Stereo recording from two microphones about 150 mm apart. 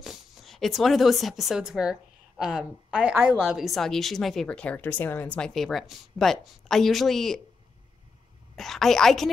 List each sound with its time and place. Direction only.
0.0 s speech: centre (ahead or behind)
8.5 s speech: centre (ahead or behind)